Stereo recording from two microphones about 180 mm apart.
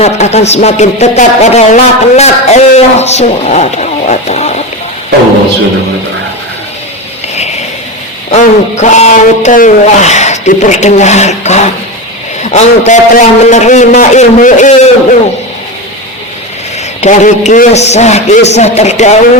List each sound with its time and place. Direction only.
0.0 s speech: 35° left (ahead or behind)
8.3 s speech: 40° left (ahead or behind)
17.0 s speech: 40° left (ahead or behind)